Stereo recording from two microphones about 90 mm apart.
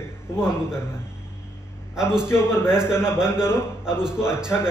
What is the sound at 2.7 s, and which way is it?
A man's voice, 10° right (ahead or behind).